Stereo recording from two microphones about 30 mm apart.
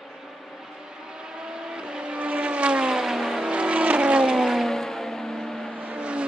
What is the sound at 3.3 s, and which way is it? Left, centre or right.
Vehicle, right.